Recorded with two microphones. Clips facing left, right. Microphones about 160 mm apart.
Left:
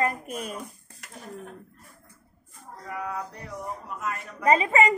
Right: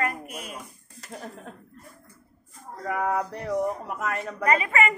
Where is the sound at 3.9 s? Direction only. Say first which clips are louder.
Right 4 dB; 65° right (ahead or behind).